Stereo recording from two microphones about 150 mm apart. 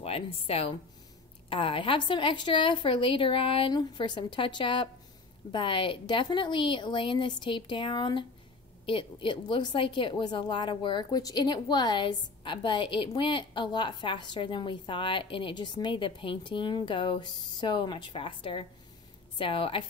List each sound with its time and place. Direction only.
0.0 s a woman's voice: 40° left (ahead or behind)